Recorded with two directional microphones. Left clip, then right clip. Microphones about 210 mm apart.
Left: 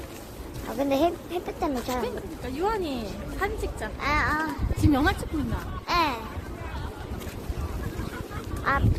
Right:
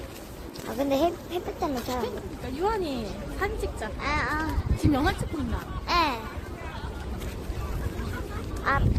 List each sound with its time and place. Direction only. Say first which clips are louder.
0.8 s speech: left 1 dB; centre (ahead or behind)
2.6 s speech: even; 10° left (ahead or behind)
4.9 s speech: left 2 dB; 45° left (ahead or behind)
5.9 s a sound: even; centre (ahead or behind)
8.7 s speech: even; centre (ahead or behind)